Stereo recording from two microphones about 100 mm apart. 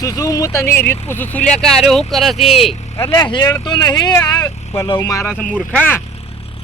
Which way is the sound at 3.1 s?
45° left (ahead or behind).